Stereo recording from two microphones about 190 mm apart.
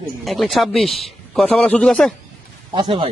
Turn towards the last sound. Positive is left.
turn(degrees=-25)  # may be behind; listen again after turning